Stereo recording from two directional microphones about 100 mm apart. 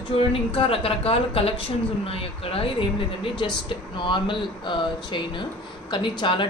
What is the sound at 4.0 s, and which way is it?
Speech, 55° left (ahead or behind).